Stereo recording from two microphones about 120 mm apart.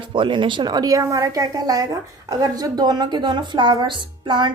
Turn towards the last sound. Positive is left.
turn(degrees=-40)  # may be behind; listen again after turning